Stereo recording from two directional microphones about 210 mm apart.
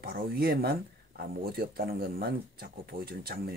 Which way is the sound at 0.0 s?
45° right (ahead or behind).